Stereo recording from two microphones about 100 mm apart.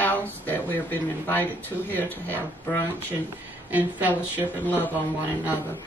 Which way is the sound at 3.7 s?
15° right (ahead or behind).